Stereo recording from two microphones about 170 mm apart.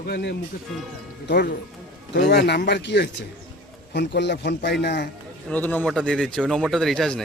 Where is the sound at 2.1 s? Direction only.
75° left (ahead or behind).